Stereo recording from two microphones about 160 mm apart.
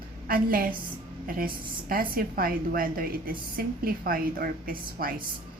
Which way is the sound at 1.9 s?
65° right (ahead or behind).